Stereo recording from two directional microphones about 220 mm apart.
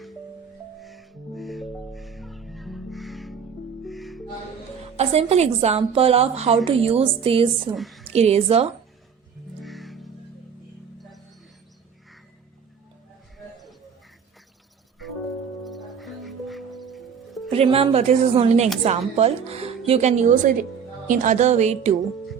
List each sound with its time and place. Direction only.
0.8 s music: centre (ahead or behind)
4.9 s speech: 30° right (ahead or behind)
7.8 s a woman's voice: centre (ahead or behind)
8.1 s speech: 30° right (ahead or behind)
9.6 s music: centre (ahead or behind)
15.0 s music: centre (ahead or behind)
17.5 s speech: 25° right (ahead or behind)